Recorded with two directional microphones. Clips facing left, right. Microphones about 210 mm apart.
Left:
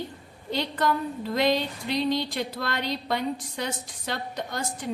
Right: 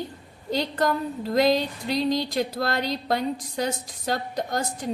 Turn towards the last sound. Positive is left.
turn(degrees=-40)  # may be behind; listen again after turning